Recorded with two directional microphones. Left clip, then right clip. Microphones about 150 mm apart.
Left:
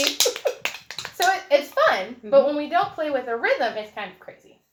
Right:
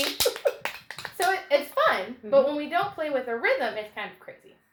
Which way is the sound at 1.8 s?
25° right (ahead or behind).